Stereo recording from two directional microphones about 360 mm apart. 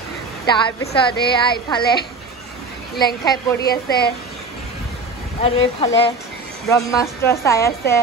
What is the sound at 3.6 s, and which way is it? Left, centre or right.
Speech, left.